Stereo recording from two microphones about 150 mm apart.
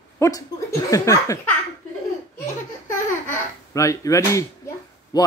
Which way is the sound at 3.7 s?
20° left (ahead or behind).